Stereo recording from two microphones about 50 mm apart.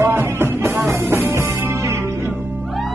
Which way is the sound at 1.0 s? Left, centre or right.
Right.